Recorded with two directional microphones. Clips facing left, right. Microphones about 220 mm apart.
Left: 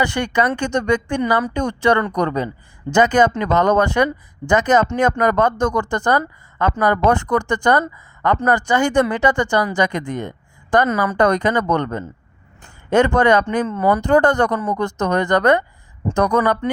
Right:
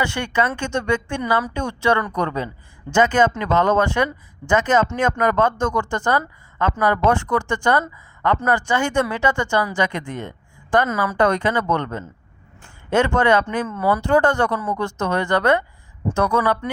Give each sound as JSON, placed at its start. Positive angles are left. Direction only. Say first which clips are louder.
{"t": 0.0, "sound": "speech", "louder": "left 3 dB", "side_deg": 35}
{"t": 14.0, "sound": "speech", "louder": "left 2 dB", "side_deg": 35}